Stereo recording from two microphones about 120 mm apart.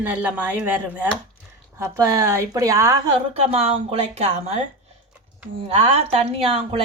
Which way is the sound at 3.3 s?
55° right (ahead or behind).